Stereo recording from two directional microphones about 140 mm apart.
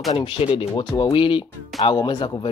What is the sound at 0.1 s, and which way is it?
Speech, 40° left (ahead or behind).